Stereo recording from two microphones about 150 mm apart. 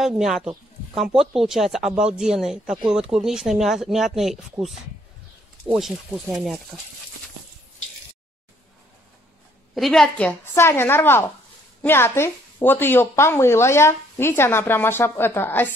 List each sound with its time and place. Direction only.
0.2 s speech: centre (ahead or behind)
9.8 s speech: centre (ahead or behind)